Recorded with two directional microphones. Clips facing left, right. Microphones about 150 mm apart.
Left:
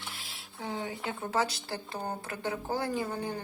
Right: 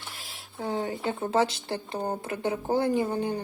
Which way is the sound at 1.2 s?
25° right (ahead or behind).